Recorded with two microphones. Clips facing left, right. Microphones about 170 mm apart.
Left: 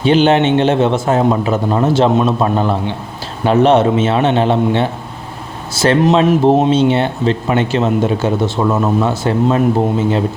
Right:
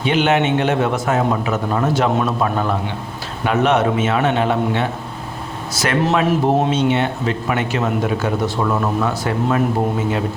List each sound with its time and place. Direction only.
0.0 s speech: 30° left (ahead or behind)